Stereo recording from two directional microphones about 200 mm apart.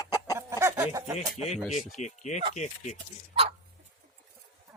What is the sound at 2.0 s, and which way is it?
Speech, 35° left (ahead or behind).